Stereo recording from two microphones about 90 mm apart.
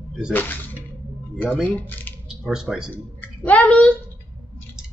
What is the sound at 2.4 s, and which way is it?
Speech, 5° right (ahead or behind).